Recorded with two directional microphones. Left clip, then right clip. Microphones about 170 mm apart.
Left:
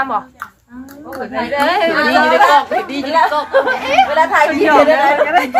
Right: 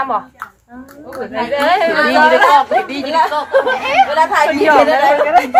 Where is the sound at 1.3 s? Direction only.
15° right (ahead or behind).